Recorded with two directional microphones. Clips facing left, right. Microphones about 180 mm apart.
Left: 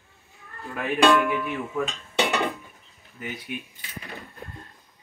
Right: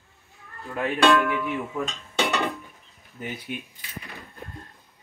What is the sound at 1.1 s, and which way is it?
Speech, 20° left (ahead or behind).